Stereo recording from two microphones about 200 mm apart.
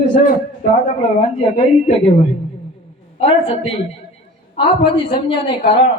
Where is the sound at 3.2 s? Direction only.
30° left (ahead or behind).